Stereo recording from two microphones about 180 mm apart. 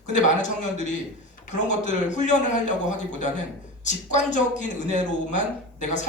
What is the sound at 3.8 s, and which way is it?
A man's voice, 40° left (ahead or behind).